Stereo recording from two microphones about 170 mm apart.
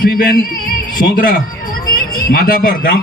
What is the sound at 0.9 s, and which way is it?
Speech, 55° left (ahead or behind).